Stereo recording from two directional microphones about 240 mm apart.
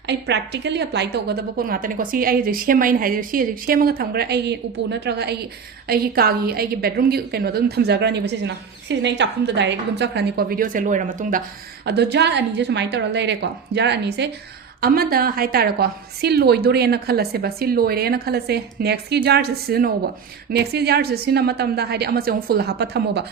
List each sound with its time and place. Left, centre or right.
0.1 s a woman's voice: right
11.9 s a woman's voice: right